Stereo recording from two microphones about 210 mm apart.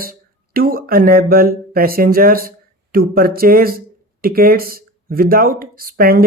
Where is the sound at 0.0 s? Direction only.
45° right (ahead or behind).